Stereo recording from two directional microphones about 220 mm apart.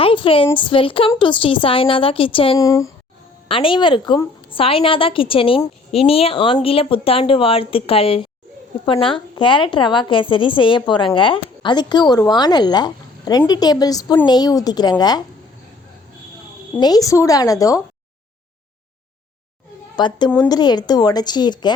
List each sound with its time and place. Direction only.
0.0 s a woman's voice: 25° left (ahead or behind)
16.8 s a woman's voice: 15° left (ahead or behind)
20.0 s a woman's voice: 20° left (ahead or behind)